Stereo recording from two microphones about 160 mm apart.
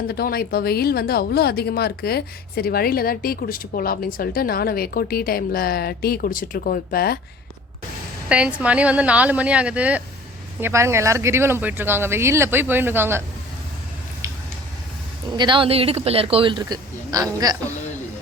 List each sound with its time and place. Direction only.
0.1 s speech: 70° left (ahead or behind)
8.3 s speech: 5° right (ahead or behind)
15.3 s speech: 30° right (ahead or behind)